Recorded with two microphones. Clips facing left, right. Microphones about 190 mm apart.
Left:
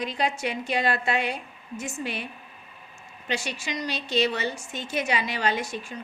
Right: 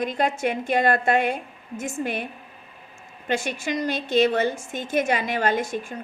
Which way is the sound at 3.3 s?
50° right (ahead or behind).